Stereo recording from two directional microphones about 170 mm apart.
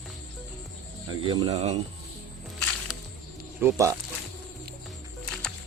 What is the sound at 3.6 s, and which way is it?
Speech, 20° right (ahead or behind).